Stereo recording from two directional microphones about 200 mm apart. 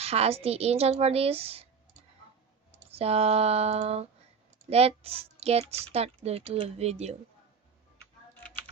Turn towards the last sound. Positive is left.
turn(degrees=-30)  # may be behind; listen again after turning